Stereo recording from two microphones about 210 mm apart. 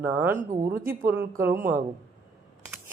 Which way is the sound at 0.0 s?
10° right (ahead or behind).